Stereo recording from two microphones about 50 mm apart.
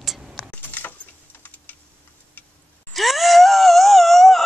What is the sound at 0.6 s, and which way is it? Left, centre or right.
Keys jangling, left.